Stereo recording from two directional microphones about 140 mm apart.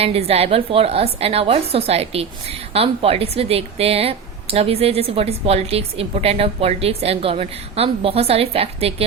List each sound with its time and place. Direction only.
0.0 s a woman's voice: 45° right (ahead or behind)